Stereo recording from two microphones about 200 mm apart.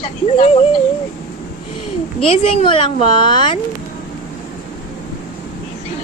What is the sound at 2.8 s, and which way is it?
Speech, 35° right (ahead or behind).